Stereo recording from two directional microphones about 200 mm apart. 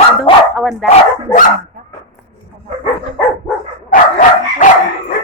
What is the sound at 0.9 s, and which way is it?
Speech, 40° left (ahead or behind).